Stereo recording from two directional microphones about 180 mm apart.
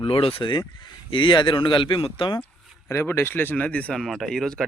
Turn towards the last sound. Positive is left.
turn(degrees=5)  # may be behind; listen again after turning